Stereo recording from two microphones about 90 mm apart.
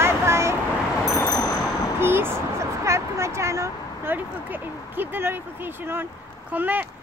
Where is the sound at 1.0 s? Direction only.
35° left (ahead or behind).